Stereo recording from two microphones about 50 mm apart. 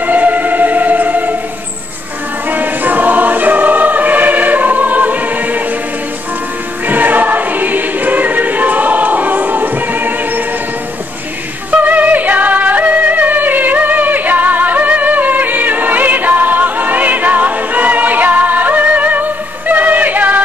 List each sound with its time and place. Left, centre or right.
0.0 s music: right
2.5 s choir: right
6.9 s choir: right
11.7 s music: right